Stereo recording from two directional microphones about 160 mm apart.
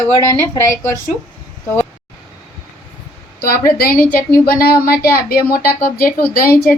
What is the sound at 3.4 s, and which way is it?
A woman's voice, 65° left (ahead or behind).